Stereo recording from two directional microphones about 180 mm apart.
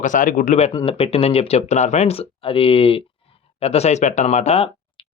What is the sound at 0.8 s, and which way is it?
Speech, 30° left (ahead or behind).